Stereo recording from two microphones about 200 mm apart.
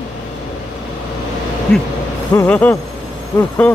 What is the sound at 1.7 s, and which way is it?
Speech, 5° left (ahead or behind).